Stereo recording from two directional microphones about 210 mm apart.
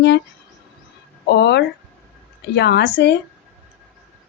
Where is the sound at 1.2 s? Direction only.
50° left (ahead or behind).